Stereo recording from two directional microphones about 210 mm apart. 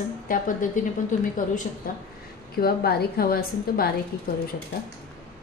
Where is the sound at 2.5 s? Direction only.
45° left (ahead or behind).